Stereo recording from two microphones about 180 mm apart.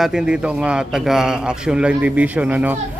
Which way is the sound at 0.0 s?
5° right (ahead or behind).